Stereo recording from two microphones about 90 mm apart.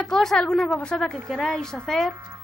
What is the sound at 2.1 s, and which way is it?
Speech, 25° right (ahead or behind).